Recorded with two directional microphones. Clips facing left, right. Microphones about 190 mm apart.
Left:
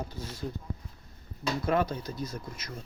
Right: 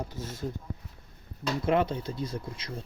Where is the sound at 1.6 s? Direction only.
25° right (ahead or behind).